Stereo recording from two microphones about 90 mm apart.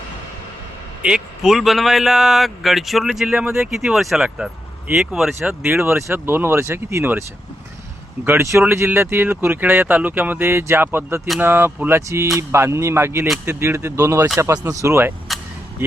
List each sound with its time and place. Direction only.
1.0 s a man's voice: 5° right (ahead or behind)
5.6 s speech: 25° right (ahead or behind)